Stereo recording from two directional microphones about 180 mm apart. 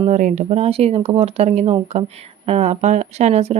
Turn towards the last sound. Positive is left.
turn(degrees=-35)  # may be behind; listen again after turning